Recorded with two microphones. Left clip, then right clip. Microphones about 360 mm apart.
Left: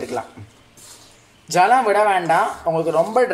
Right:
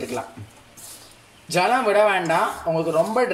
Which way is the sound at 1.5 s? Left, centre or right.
Left.